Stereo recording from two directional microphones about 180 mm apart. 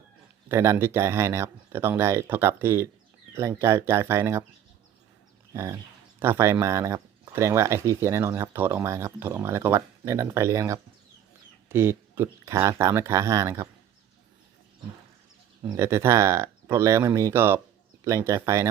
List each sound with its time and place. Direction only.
0.4 s speech: 15° right (ahead or behind)
6.1 s speech: 15° right (ahead or behind)
15.7 s speech: 15° right (ahead or behind)